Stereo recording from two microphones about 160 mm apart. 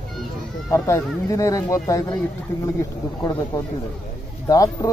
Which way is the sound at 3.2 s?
20° left (ahead or behind).